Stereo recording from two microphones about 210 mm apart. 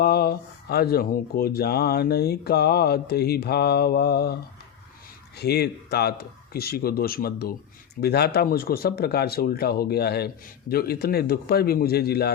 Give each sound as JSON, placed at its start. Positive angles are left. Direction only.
{"t": 0.0, "sound": "speech", "side_deg": 50}
{"t": 5.4, "sound": "speech", "side_deg": 50}